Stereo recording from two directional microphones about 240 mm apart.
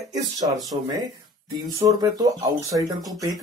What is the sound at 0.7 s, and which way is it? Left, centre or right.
Speech, centre.